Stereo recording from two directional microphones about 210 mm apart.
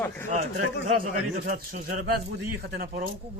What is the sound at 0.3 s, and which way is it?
Speech, 40° right (ahead or behind).